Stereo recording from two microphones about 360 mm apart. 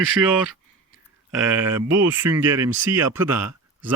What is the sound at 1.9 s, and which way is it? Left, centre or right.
Speech, right.